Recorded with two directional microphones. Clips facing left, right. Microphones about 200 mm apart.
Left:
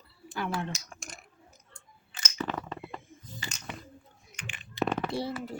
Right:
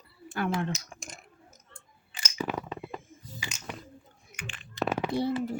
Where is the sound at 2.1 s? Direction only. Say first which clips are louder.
Right 2 dB; 10° right (ahead or behind).